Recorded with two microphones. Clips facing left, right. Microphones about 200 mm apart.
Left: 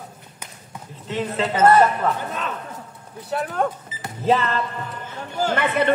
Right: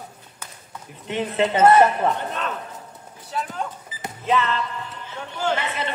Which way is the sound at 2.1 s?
Centre (ahead or behind).